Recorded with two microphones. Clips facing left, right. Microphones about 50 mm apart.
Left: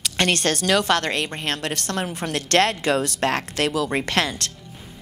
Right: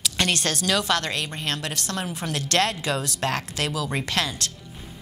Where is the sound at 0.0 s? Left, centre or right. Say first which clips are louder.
Left 3 dB; left.